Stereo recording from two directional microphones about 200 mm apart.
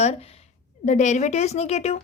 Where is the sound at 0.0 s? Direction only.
30° left (ahead or behind).